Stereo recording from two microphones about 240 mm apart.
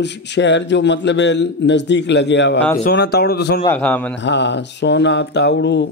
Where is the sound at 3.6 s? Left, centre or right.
Centre.